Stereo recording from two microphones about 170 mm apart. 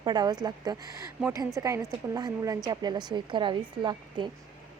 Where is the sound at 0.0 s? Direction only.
25° right (ahead or behind).